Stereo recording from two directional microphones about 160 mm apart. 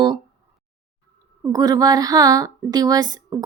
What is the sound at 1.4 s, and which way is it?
Speech, 25° right (ahead or behind).